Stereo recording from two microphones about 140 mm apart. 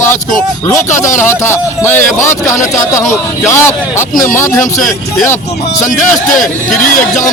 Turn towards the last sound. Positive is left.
turn(degrees=65)  # may be behind; listen again after turning